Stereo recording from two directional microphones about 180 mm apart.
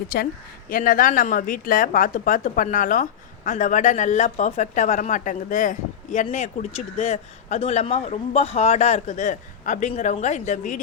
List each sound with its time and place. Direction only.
0.1 s speech: 55° left (ahead or behind)